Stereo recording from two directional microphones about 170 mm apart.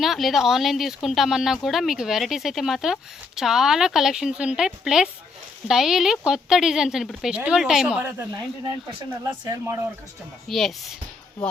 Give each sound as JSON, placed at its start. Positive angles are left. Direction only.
{"t": 0.0, "sound": "speech", "side_deg": 0}
{"t": 8.4, "sound": "speech", "side_deg": -25}
{"t": 10.5, "sound": "speech", "side_deg": 0}